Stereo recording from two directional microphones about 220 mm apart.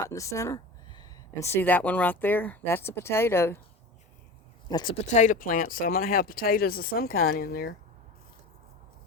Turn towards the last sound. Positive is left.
turn(degrees=40)  # may be behind; listen again after turning